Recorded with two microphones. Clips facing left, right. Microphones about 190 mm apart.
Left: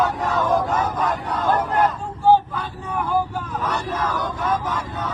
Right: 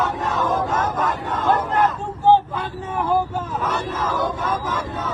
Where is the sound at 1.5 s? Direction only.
25° right (ahead or behind).